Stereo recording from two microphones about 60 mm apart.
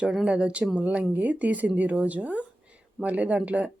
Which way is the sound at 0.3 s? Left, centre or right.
Centre.